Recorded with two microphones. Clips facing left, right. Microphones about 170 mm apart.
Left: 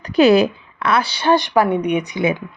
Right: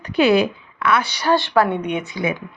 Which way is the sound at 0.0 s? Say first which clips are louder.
Left 3 dB; 40° left (ahead or behind).